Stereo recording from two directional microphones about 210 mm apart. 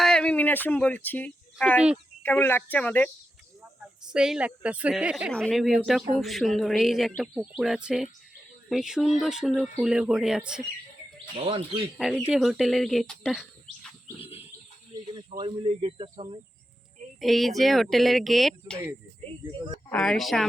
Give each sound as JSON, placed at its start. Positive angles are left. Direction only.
{"t": 0.0, "sound": "music", "side_deg": 5}
{"t": 2.2, "sound": "speech", "side_deg": 10}
{"t": 4.1, "sound": "speech", "side_deg": -5}
{"t": 11.3, "sound": "speech", "side_deg": -25}
{"t": 11.9, "sound": "speech", "side_deg": 0}
{"t": 14.2, "sound": "wild animals", "side_deg": 30}
{"t": 15.1, "sound": "speech", "side_deg": -20}
{"t": 17.2, "sound": "speech", "side_deg": 0}
{"t": 19.2, "sound": "speech", "side_deg": -25}
{"t": 19.9, "sound": "speech", "side_deg": 5}